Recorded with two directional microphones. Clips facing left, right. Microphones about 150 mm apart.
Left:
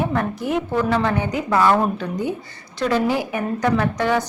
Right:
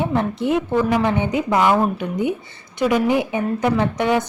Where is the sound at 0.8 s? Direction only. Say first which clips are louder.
Even; 10° right (ahead or behind).